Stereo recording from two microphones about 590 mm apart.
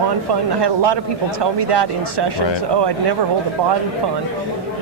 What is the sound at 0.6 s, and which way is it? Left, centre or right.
A man's voice, right.